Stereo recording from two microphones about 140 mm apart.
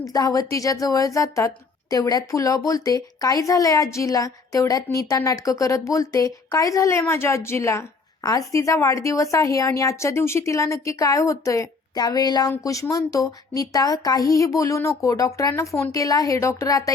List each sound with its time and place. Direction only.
0.0 s a woman's voice: 25° left (ahead or behind)